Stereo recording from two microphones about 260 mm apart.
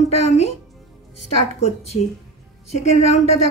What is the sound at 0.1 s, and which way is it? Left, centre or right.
Speech, left.